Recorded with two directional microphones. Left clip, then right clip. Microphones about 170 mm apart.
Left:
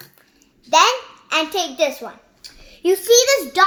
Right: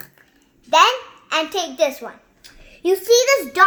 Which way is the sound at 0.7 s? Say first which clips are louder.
Even; 10° left (ahead or behind).